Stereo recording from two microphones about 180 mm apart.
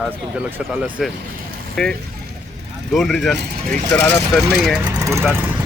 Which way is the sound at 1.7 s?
5° left (ahead or behind).